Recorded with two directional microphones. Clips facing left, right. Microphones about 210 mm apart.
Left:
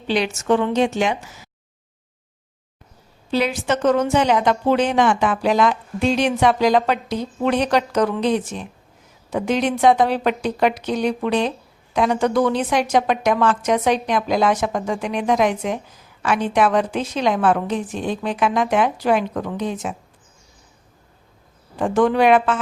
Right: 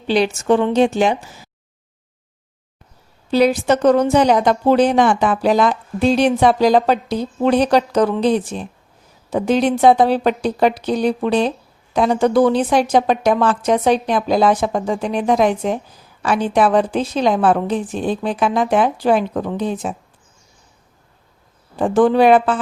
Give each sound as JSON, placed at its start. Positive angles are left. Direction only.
{"t": 0.1, "sound": "a woman's voice", "side_deg": -35}
{"t": 3.3, "sound": "a woman's voice", "side_deg": -40}
{"t": 21.8, "sound": "a woman's voice", "side_deg": -35}